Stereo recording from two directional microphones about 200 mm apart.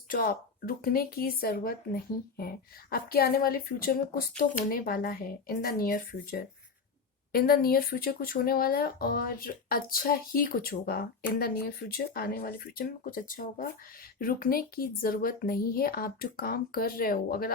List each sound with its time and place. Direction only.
0.1 s speech: 45° left (ahead or behind)